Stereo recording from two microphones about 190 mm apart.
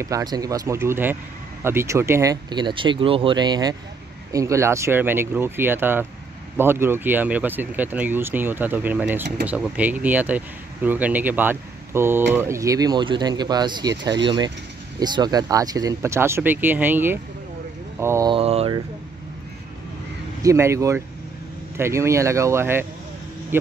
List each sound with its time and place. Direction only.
0.0 s speech: 20° right (ahead or behind)
17.9 s mantra: 15° right (ahead or behind)
18.3 s mantra: 30° right (ahead or behind)
20.4 s speech: 15° right (ahead or behind)